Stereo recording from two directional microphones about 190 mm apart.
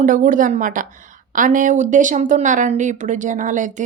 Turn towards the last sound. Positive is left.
turn(degrees=-40)  # may be behind; listen again after turning